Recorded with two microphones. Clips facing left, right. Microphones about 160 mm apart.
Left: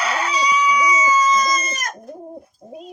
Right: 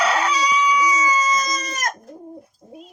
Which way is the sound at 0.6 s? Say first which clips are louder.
Left 1 dB; 60° left (ahead or behind).